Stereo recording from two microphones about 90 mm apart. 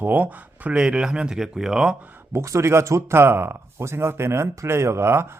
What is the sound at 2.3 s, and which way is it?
Speech, 35° right (ahead or behind).